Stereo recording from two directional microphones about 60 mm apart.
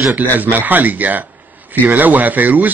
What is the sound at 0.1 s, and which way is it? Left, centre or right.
Speech, right.